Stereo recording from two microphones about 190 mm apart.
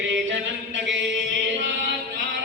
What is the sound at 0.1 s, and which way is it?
Chant, 80° right.